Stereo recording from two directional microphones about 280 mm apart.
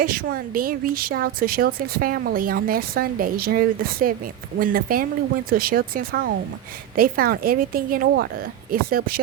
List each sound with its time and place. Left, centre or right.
0.0 s a woman's voice: right